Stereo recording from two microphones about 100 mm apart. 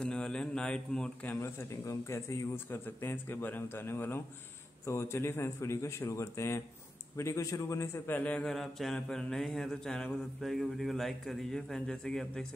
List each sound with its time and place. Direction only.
0.0 s speech: 10° left (ahead or behind)
1.4 s a man's voice: 30° left (ahead or behind); by 12.4 s 5° left (ahead or behind)